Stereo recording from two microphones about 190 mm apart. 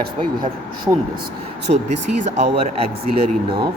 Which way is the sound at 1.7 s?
35° right (ahead or behind).